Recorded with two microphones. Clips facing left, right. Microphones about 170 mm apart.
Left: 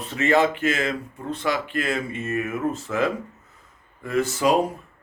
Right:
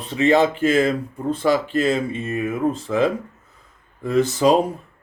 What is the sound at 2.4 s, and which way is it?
Speech, 30° right (ahead or behind).